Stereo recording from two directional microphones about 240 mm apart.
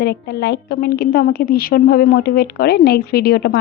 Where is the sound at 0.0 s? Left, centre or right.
Left.